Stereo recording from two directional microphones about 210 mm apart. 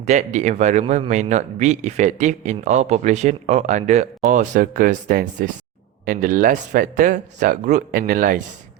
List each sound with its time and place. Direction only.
0.0 s a man's voice: 35° right (ahead or behind)